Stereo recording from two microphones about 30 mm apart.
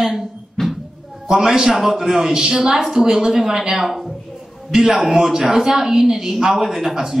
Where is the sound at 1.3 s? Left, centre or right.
Centre.